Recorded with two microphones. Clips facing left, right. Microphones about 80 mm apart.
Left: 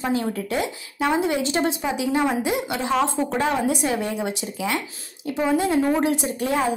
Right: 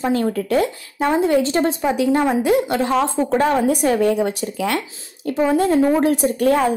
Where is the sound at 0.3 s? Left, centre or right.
Right.